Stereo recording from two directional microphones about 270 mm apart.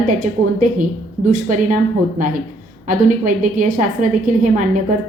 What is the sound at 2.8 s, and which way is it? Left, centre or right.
A woman's voice, right.